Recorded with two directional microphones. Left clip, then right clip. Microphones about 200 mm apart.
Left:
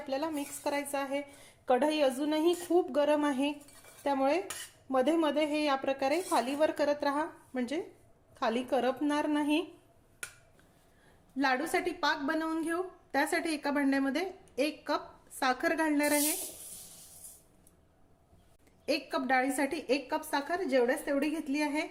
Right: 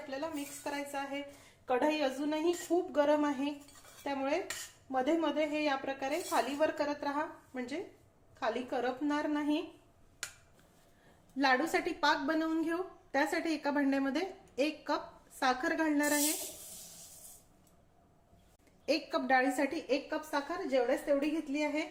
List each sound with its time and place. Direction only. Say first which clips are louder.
0.1 s a woman's voice: left 6 dB; 50° left (ahead or behind)
11.3 s a woman's voice: even; 15° left (ahead or behind)
18.9 s a woman's voice: even; 20° left (ahead or behind); by 21.8 s 50° left (ahead or behind)